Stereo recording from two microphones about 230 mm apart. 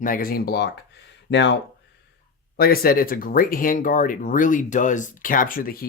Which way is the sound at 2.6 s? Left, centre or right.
Left.